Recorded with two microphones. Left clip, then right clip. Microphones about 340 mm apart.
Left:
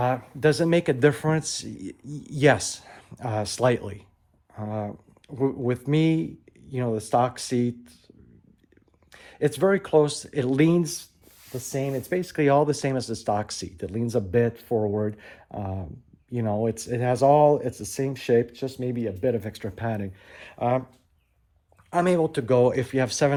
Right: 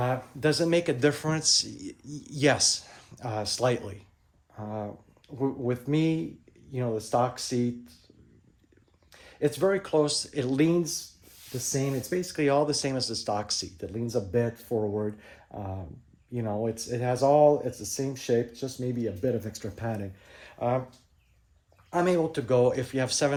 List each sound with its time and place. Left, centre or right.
0.0 s speech: left
9.1 s speech: left
11.7 s speech: centre
21.8 s speech: left